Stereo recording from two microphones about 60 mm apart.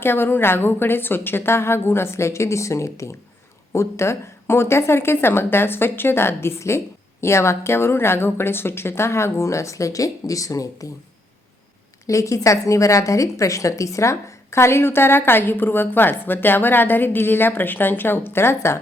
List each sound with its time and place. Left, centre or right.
0.0 s a woman's voice: left
12.0 s a woman's voice: left